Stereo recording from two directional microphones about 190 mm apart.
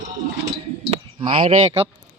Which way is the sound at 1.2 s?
25° right (ahead or behind).